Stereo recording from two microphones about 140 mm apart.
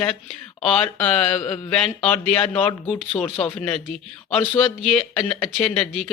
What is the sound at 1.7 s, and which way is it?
Speech, 5° left (ahead or behind).